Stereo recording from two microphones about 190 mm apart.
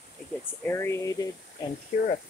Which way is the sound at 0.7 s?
15° left (ahead or behind).